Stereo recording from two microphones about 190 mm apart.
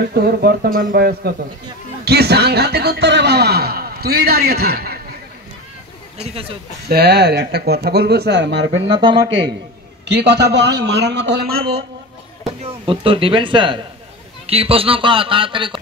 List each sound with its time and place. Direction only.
0.1 s speech: 55° right (ahead or behind)
6.9 s speech: 55° right (ahead or behind)
8.7 s a man's voice: 25° right (ahead or behind)
10.1 s speech: 65° right (ahead or behind)
12.6 s a man's voice: 25° right (ahead or behind)